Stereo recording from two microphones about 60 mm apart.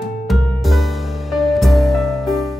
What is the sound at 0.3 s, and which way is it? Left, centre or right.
Music, centre.